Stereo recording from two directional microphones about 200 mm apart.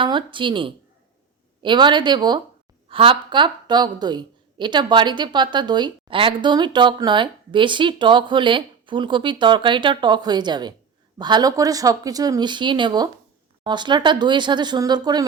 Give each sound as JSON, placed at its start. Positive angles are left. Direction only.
{"t": 0.0, "sound": "a woman's voice", "side_deg": -25}